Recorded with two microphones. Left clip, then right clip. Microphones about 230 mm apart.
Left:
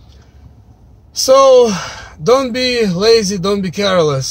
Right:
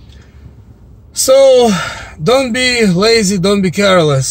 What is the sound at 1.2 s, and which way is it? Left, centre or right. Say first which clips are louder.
Speech: right 1 dB; centre.